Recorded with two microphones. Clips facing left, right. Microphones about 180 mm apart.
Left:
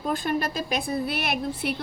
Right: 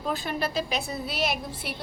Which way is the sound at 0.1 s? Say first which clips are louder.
Left 3 dB; 50° left (ahead or behind).